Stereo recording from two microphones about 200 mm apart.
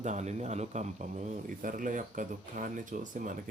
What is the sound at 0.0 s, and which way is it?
Speech, 35° right (ahead or behind).